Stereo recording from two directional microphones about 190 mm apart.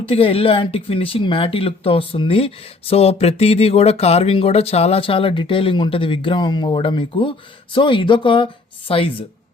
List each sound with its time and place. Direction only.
0.1 s speech: 30° left (ahead or behind)